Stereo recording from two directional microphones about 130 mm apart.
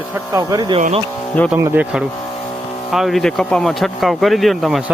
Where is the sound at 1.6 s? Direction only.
20° right (ahead or behind).